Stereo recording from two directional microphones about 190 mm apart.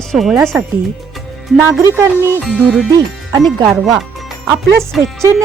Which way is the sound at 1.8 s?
15° right (ahead or behind).